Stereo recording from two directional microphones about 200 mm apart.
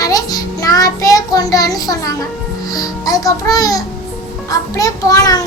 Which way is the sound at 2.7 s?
20° left (ahead or behind).